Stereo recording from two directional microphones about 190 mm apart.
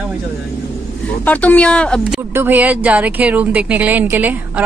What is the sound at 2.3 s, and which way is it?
Speech, 10° right (ahead or behind).